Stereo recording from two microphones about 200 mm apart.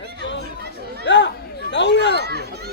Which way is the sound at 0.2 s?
65° left (ahead or behind).